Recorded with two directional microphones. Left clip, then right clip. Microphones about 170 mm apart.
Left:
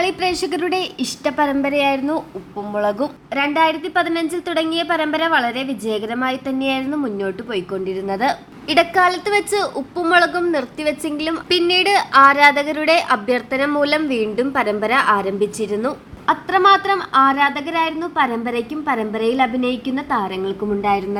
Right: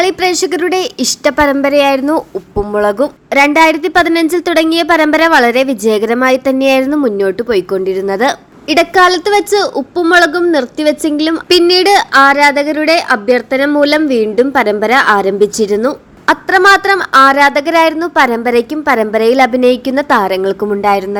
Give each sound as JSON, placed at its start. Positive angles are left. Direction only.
{"t": 0.0, "sound": "a woman's voice", "side_deg": -30}